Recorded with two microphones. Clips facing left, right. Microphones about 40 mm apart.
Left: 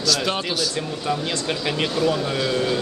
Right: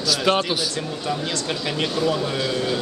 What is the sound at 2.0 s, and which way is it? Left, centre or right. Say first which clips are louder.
Speech: left 1 dB; centre.